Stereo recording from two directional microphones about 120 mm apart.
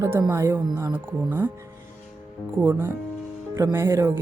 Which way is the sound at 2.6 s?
20° right (ahead or behind).